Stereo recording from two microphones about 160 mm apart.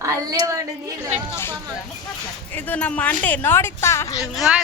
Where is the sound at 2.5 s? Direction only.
10° left (ahead or behind).